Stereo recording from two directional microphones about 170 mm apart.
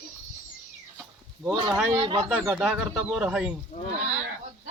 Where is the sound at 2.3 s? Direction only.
Centre (ahead or behind).